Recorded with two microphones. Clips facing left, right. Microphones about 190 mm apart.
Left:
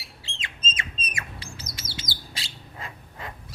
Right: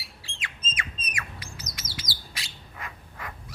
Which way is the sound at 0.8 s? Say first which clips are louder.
Right 2 dB; 25° left (ahead or behind).